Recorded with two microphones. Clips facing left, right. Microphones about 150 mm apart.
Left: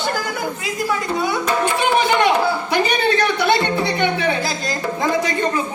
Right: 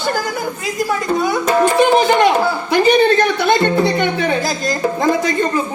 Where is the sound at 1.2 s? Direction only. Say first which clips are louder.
Right 6 dB; 45° right (ahead or behind).